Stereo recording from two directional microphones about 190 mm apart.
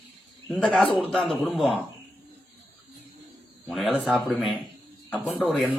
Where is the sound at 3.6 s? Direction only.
Centre (ahead or behind).